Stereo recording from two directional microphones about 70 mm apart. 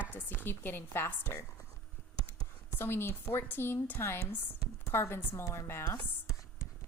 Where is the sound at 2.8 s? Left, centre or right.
Left.